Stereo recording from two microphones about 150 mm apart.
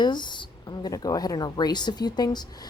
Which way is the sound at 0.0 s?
30° left (ahead or behind).